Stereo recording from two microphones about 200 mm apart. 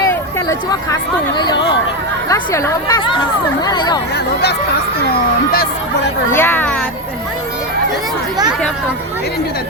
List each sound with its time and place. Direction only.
2.3 s a woman's voice: 15° left (ahead or behind)
6.3 s a woman's voice: 10° left (ahead or behind)